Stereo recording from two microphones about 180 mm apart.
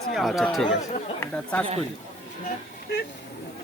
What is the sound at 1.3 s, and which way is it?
Speech, 5° left (ahead or behind).